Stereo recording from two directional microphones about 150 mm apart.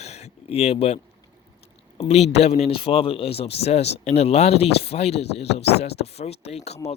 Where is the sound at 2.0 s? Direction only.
45° left (ahead or behind).